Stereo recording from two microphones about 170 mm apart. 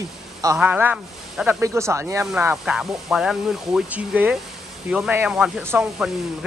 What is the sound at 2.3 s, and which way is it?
Speech, 5° right (ahead or behind).